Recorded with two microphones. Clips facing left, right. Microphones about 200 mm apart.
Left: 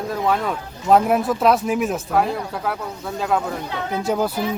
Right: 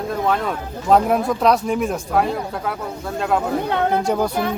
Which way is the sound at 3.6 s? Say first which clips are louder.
Right 7 dB; 60° right (ahead or behind).